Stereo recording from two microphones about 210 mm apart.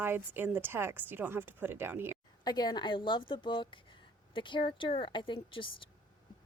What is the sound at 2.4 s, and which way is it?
Speech, 20° left (ahead or behind).